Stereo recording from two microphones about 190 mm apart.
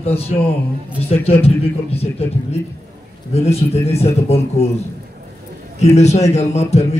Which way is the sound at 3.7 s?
35° left (ahead or behind).